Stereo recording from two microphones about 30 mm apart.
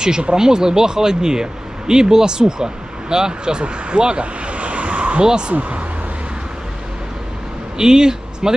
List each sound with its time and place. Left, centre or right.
0.0 s speech: right
3.6 s vehicle: right
5.2 s speech: right
5.5 s speech: right
7.7 s speech: right